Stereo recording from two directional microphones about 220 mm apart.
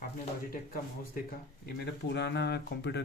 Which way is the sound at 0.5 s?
40° left (ahead or behind).